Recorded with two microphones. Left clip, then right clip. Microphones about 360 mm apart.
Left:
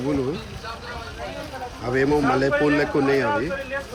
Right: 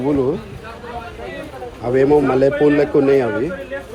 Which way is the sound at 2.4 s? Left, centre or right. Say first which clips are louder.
Right 6 dB; right.